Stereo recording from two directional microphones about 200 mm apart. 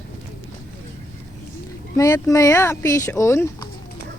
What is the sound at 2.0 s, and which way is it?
Speech, 15° left (ahead or behind).